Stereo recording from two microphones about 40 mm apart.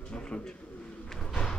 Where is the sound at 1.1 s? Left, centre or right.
Centre.